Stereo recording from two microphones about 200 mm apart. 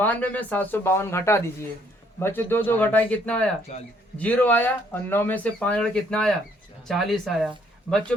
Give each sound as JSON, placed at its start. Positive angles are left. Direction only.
{"t": 0.0, "sound": "speech", "side_deg": 10}
{"t": 3.7, "sound": "a man's voice", "side_deg": 35}
{"t": 4.2, "sound": "speech", "side_deg": 10}